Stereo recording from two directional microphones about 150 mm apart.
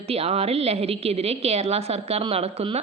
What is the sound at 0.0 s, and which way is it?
A woman's voice, 40° right (ahead or behind).